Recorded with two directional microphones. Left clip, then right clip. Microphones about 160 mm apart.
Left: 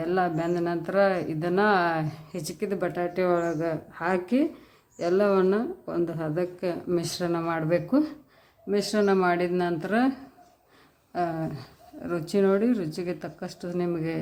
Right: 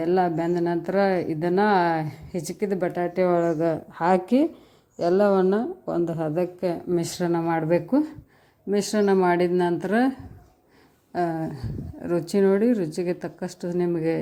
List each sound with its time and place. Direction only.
0.0 s a woman's voice: 25° right (ahead or behind)
11.1 s a woman's voice: 25° right (ahead or behind)